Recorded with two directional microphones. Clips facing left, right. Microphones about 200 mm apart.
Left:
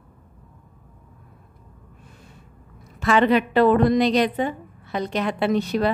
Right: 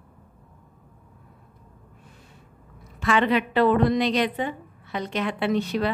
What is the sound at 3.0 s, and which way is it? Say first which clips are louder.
A woman's voice: left 4 dB; 40° left (ahead or behind).